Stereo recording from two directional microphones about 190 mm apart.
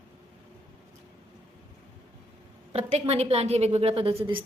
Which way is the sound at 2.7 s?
35° right (ahead or behind).